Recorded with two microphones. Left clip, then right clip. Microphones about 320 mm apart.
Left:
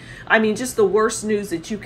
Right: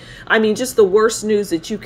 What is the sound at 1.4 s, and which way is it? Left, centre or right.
Speech, right.